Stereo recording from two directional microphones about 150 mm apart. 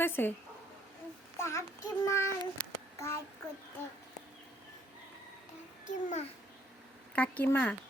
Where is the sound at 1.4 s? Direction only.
20° left (ahead or behind).